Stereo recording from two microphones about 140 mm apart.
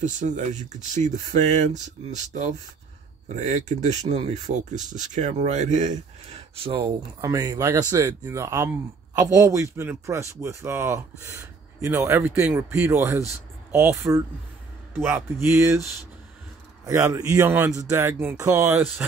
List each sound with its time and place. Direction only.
0.0 s speech: 60° right (ahead or behind)
6.5 s speech: 40° right (ahead or behind)
7.2 s speech: 25° right (ahead or behind)
16.8 s speech: 20° right (ahead or behind)